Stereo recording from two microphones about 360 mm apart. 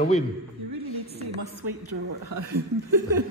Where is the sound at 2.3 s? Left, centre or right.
Right.